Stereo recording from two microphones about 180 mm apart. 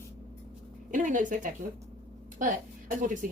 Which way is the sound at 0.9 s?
45° right (ahead or behind).